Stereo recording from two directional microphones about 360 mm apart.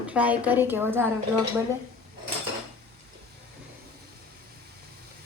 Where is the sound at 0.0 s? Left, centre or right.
Centre.